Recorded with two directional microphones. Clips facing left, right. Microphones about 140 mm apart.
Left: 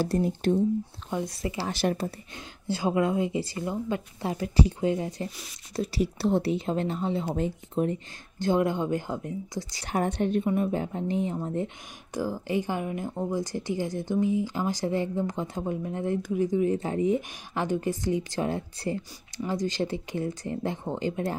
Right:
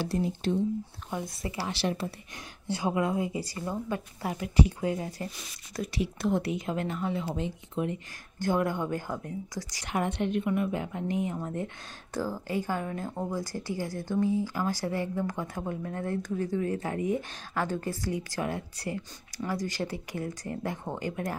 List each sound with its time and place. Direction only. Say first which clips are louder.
0.0 s speech: left 4 dB; 50° left (ahead or behind)
1.7 s speech: left 4 dB; 50° left (ahead or behind)
2.7 s speech: left 3 dB; 25° left (ahead or behind)
7.3 s speech: left 4 dB; 40° left (ahead or behind)
8.4 s speech: left 3 dB; 20° left (ahead or behind)
9.8 s speech: left 3 dB; 40° left (ahead or behind)
12.1 s speech: left 3 dB; 15° left (ahead or behind)